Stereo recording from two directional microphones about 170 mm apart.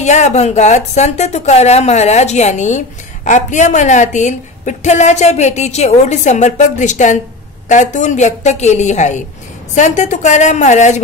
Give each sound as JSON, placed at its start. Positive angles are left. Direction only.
{"t": 0.0, "sound": "a woman's voice", "side_deg": 40}